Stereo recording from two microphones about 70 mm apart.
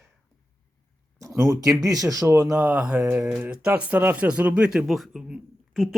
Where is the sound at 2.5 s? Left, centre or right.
Centre.